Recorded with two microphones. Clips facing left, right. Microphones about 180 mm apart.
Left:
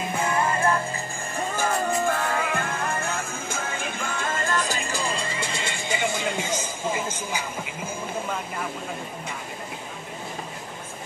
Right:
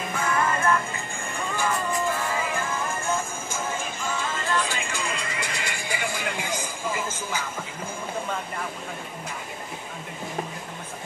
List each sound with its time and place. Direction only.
0.1 s music: 30° left (ahead or behind)